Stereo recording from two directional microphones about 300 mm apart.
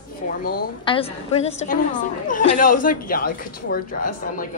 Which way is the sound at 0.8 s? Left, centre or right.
Centre.